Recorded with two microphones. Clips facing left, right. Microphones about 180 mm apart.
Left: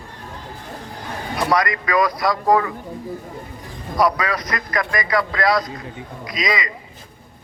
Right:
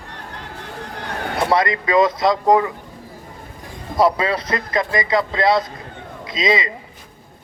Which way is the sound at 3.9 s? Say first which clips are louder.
Right 2 dB; 25° right (ahead or behind).